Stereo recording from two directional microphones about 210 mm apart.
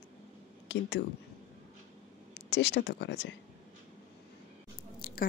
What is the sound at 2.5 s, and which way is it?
Speech, 50° left (ahead or behind).